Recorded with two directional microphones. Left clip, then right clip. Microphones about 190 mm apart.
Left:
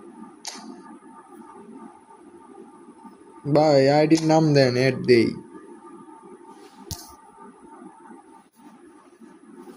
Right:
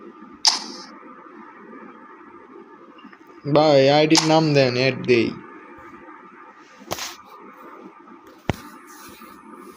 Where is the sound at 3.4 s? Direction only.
15° left (ahead or behind).